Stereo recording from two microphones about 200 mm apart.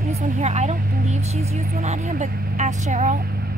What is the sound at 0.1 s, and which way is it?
Speech, 40° right (ahead or behind).